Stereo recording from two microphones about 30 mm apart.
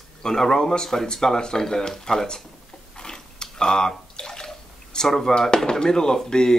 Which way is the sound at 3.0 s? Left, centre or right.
Left.